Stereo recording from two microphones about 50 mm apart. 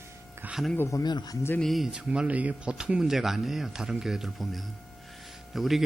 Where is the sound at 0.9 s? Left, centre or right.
Left.